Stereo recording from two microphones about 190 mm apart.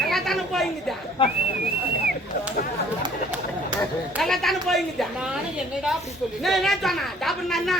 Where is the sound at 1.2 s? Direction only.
25° left (ahead or behind).